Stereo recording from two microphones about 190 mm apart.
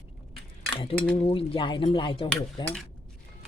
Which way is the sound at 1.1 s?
30° left (ahead or behind).